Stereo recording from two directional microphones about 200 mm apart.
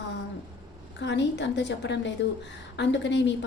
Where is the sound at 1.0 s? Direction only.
60° left (ahead or behind).